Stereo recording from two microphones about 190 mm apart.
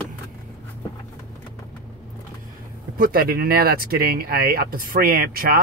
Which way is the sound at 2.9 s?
50° right (ahead or behind).